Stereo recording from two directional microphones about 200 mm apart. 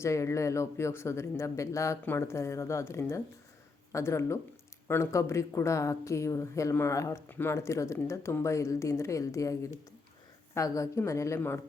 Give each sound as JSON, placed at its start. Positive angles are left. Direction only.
{"t": 0.0, "sound": "speech", "side_deg": 15}